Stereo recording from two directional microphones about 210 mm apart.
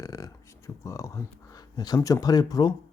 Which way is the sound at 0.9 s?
15° left (ahead or behind).